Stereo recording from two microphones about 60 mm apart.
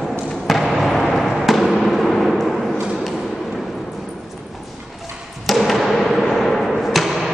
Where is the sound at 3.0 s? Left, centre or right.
Centre.